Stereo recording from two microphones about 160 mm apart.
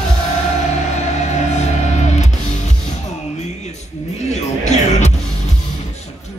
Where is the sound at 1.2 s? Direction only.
45° left (ahead or behind).